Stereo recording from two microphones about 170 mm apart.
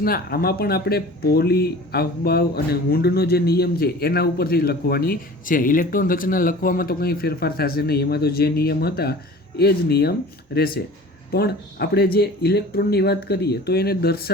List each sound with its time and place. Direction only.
0.0 s a man's voice: 60° left (ahead or behind)